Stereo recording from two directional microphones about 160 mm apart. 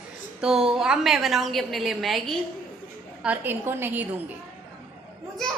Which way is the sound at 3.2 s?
10° right (ahead or behind).